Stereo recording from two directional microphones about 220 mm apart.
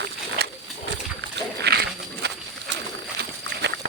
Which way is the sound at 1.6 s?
50° right (ahead or behind).